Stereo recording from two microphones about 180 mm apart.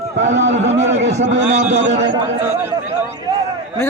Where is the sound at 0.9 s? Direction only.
80° right.